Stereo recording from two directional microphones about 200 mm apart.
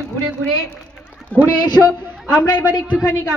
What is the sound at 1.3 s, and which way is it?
Speech, 10° left (ahead or behind).